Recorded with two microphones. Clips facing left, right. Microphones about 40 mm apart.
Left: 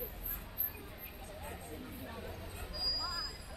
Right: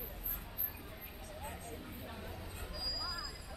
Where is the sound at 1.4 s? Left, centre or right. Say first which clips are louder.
Even; centre.